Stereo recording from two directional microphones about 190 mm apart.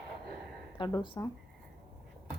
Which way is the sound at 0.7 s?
25° left (ahead or behind).